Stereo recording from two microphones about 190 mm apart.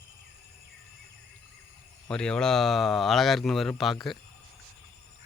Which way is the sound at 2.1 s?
5° left (ahead or behind).